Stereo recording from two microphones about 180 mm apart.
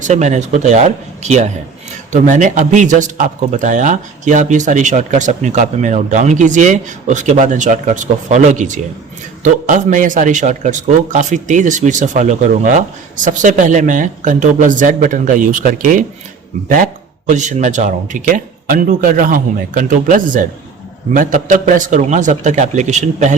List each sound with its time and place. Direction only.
0.0 s speech: 40° right (ahead or behind)